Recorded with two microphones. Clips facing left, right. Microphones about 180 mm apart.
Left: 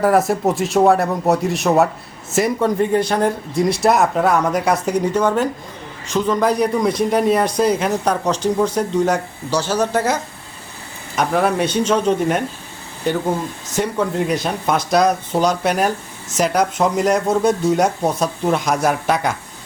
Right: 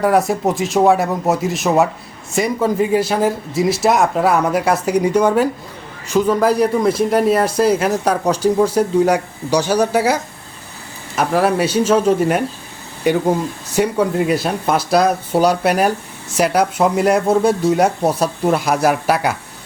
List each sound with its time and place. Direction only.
0.0 s a man's voice: centre (ahead or behind)
11.2 s a man's voice: 5° right (ahead or behind)